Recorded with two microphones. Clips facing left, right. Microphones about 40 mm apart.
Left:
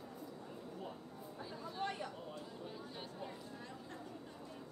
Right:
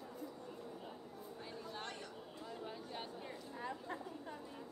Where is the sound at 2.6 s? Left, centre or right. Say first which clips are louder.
Right 1 dB; centre.